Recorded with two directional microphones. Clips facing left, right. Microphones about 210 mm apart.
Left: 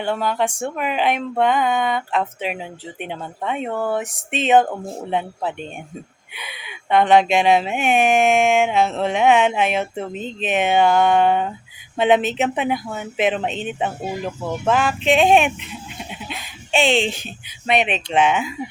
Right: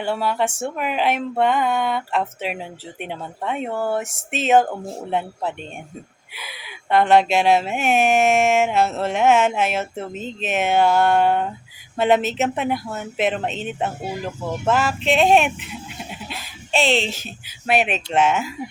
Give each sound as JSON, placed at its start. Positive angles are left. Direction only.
{"t": 0.0, "sound": "speech", "side_deg": -5}
{"t": 16.3, "sound": "a sound", "side_deg": 0}
{"t": 17.7, "sound": "speech", "side_deg": 0}